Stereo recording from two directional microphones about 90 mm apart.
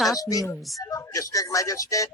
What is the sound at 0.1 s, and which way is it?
Speech, 40° left (ahead or behind).